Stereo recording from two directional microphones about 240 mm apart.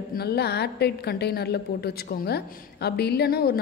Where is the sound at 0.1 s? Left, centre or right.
Left.